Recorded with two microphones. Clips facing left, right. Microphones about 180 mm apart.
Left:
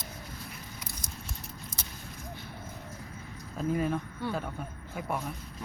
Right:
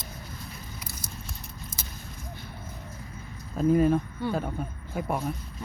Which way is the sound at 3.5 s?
40° right (ahead or behind).